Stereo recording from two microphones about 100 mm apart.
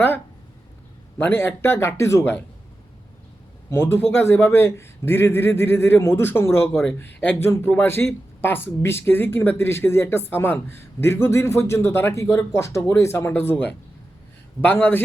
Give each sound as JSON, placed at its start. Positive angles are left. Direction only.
{"t": 1.2, "sound": "speech", "side_deg": 20}
{"t": 3.7, "sound": "speech", "side_deg": 25}